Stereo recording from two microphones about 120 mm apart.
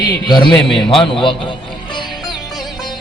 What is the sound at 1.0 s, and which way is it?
Speech, 45° left (ahead or behind).